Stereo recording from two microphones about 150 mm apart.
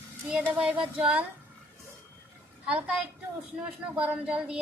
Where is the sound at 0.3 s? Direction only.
5° right (ahead or behind).